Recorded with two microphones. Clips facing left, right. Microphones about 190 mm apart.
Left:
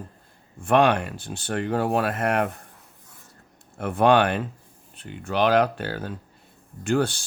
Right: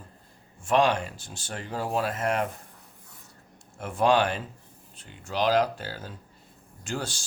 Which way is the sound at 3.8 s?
60° left (ahead or behind).